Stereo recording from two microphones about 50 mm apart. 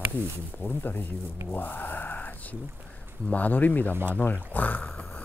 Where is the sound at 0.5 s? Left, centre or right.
Left.